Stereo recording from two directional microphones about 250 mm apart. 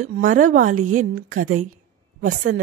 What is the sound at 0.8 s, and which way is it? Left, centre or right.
Speech, right.